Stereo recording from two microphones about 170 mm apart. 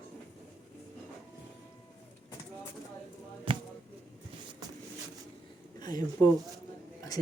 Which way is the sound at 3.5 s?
30° right (ahead or behind).